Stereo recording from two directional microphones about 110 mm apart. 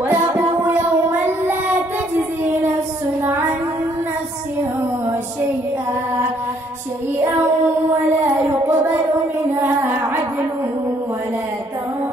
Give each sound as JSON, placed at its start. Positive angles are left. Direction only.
{"t": 0.1, "sound": "music", "side_deg": -20}
{"t": 8.4, "sound": "child singing", "side_deg": -20}